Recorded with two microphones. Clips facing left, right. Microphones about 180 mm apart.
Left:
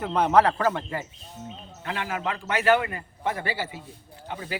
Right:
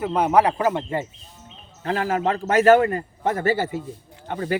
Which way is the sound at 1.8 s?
40° right (ahead or behind).